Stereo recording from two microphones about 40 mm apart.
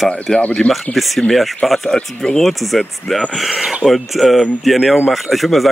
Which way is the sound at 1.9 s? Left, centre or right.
Centre.